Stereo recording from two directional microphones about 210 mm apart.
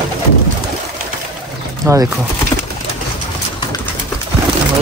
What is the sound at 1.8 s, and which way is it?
Speech, 15° right (ahead or behind).